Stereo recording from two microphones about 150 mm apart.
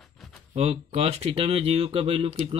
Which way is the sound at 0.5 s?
45° right (ahead or behind).